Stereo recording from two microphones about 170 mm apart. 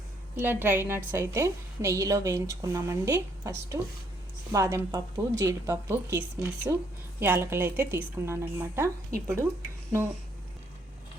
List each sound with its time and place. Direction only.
0.3 s a woman's voice: 10° right (ahead or behind)